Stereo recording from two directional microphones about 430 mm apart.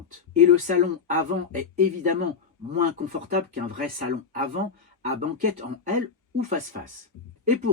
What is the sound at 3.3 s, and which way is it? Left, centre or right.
Speech, centre.